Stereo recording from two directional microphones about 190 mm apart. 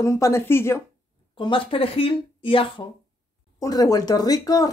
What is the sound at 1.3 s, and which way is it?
Speech, 25° left (ahead or behind).